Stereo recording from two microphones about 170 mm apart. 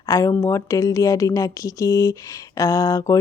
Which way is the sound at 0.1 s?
20° left (ahead or behind).